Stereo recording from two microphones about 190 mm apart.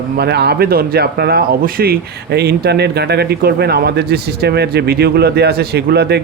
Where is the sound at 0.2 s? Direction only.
60° right (ahead or behind).